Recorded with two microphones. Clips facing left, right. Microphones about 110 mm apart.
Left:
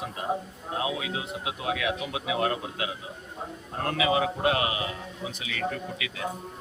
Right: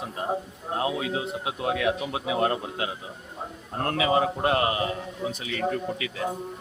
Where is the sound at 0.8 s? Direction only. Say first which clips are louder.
Right 5 dB; 35° right (ahead or behind).